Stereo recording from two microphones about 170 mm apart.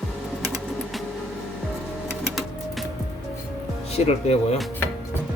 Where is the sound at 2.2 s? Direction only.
Centre (ahead or behind).